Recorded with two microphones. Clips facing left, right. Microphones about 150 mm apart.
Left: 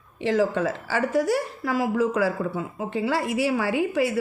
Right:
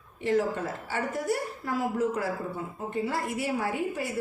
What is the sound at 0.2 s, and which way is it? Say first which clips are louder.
A woman's voice: left 4 dB; 90° left.